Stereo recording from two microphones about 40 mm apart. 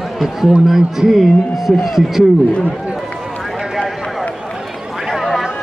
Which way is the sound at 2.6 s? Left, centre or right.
Right.